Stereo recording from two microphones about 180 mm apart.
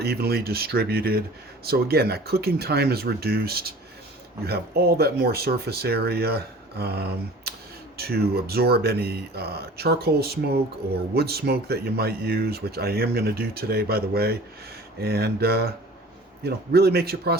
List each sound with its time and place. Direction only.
0.0 s speech: 60° right (ahead or behind)